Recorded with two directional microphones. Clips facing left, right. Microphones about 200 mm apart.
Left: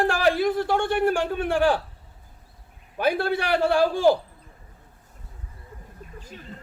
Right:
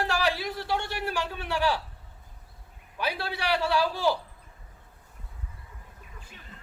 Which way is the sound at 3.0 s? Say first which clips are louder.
Left 9 dB; 50° left (ahead or behind).